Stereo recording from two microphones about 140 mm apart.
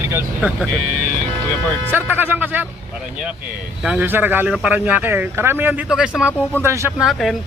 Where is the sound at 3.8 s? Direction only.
10° right (ahead or behind).